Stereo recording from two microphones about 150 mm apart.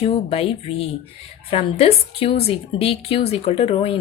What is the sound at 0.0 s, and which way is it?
A woman's voice, 40° left (ahead or behind).